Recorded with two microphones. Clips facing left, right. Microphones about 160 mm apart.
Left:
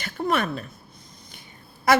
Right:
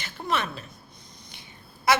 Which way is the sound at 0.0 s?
55° left (ahead or behind).